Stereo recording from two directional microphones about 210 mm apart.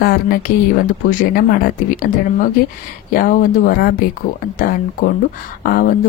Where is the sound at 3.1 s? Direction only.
40° left (ahead or behind).